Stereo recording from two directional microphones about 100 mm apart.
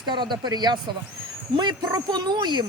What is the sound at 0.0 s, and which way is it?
Speech, 50° right (ahead or behind).